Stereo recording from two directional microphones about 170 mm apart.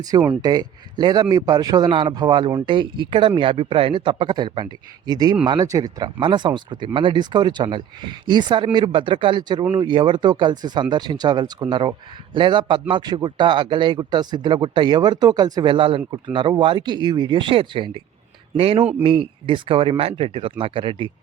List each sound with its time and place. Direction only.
0.3 s a man's voice: 25° right (ahead or behind)